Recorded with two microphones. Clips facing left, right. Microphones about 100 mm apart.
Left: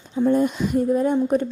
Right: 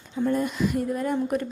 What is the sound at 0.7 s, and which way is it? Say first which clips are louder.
Speech: left 6 dB; 35° left (ahead or behind).